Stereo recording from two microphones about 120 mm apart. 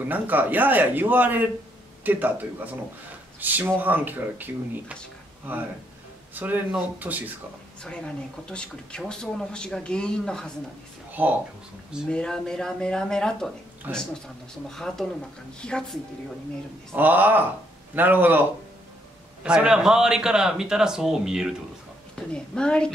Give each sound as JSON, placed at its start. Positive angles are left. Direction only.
{"t": 0.0, "sound": "speech", "side_deg": -15}
{"t": 6.3, "sound": "speech", "side_deg": -15}
{"t": 7.8, "sound": "speech", "side_deg": 5}
{"t": 11.1, "sound": "a sound", "side_deg": -15}
{"t": 12.1, "sound": "speech", "side_deg": 5}
{"t": 13.9, "sound": "speech", "side_deg": -15}
{"t": 14.7, "sound": "speech", "side_deg": 5}
{"t": 16.9, "sound": "speech", "side_deg": -15}
{"t": 19.4, "sound": "speech", "side_deg": -10}
{"t": 22.3, "sound": "speech", "side_deg": 10}